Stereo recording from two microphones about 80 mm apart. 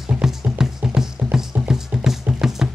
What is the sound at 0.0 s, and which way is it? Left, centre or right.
Music, centre.